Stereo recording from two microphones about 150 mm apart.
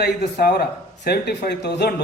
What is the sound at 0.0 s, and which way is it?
A woman's voice, 90° left.